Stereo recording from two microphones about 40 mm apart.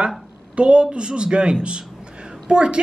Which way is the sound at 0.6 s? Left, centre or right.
Right.